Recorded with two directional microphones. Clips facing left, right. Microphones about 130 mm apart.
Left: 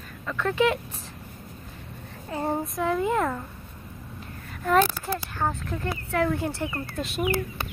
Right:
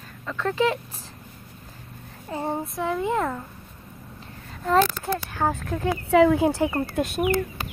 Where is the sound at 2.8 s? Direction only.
15° right (ahead or behind).